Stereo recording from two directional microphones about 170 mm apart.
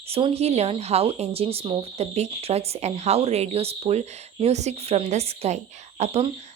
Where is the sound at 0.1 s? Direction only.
35° right (ahead or behind).